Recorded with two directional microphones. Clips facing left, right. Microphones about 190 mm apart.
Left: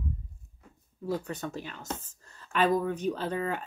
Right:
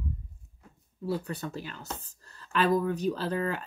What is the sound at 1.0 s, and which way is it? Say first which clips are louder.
Speech: even; 35° right (ahead or behind).